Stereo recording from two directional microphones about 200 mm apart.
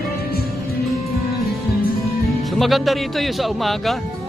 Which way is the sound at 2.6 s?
Centre (ahead or behind).